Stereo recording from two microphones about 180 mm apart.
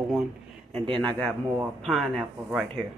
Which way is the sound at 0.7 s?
30° right (ahead or behind).